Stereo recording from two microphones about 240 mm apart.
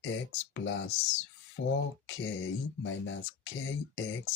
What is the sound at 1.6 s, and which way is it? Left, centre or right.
Speech, left.